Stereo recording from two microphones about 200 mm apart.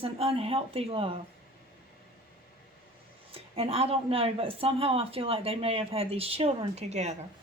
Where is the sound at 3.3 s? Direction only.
30° right (ahead or behind).